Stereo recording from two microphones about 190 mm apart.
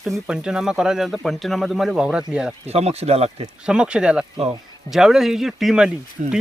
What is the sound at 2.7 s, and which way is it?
Speech, 35° right (ahead or behind).